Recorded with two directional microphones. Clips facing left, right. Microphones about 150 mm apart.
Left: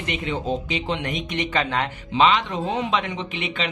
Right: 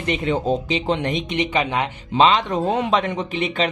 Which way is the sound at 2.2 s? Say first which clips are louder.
Right 3 dB; 30° right (ahead or behind).